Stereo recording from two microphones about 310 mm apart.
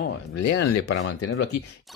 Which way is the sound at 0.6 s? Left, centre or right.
Left.